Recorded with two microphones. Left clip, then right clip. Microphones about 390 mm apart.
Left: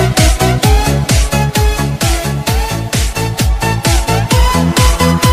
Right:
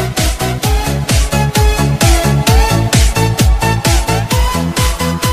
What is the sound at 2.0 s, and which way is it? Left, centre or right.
Music, right.